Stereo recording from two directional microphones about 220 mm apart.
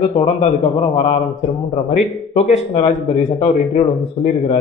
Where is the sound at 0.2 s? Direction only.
30° left (ahead or behind).